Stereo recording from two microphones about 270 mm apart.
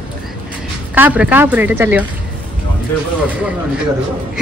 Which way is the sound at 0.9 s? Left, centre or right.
Centre.